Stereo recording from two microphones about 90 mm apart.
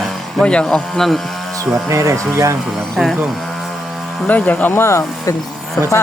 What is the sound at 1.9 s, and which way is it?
Speech, 35° right (ahead or behind).